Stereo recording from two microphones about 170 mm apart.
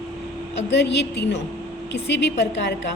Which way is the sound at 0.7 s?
90° left.